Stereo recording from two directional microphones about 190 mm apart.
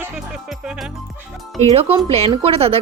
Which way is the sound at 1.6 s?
30° right (ahead or behind).